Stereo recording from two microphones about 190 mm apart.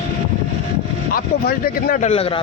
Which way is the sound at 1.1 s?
50° left (ahead or behind).